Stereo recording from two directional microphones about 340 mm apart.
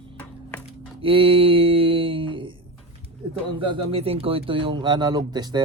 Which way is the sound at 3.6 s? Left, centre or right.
Centre.